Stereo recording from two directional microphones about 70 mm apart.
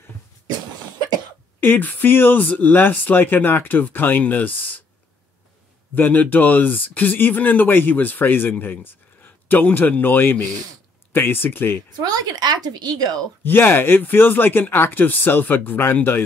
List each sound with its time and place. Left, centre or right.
1.6 s speech: left
5.9 s a man's voice: left
12.0 s speech: right
13.4 s speech: left